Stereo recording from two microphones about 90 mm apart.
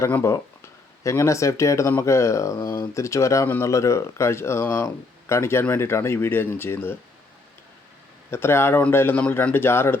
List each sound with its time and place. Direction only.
0.1 s speech: 30° left (ahead or behind)
3.4 s speech: 20° left (ahead or behind)
3.7 s speech: 35° left (ahead or behind)
8.3 s speech: 30° left (ahead or behind)